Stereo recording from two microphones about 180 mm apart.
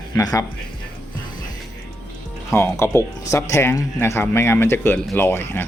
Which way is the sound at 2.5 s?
15° left (ahead or behind).